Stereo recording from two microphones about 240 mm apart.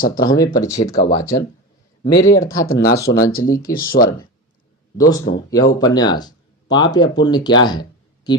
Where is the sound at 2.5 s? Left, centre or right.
Left.